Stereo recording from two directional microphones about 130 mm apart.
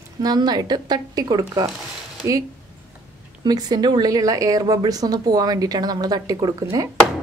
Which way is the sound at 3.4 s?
30° right (ahead or behind).